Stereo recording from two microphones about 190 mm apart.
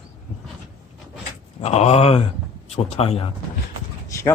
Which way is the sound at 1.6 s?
35° left (ahead or behind).